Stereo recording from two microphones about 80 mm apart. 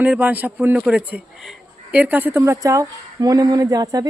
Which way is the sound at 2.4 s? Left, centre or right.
Right.